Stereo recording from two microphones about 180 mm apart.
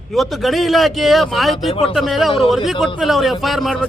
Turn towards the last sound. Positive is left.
turn(degrees=0)  # may be behind; listen again after turning